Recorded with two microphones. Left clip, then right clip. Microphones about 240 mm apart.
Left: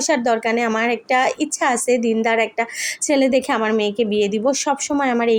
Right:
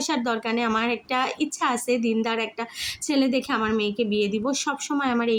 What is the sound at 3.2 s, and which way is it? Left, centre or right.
Speech, centre.